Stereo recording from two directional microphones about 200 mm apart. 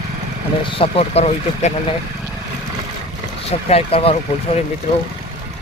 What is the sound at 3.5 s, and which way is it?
Speech, 30° left (ahead or behind).